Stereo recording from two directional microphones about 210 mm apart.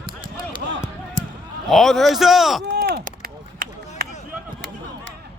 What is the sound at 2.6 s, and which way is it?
Chop, 50° right (ahead or behind).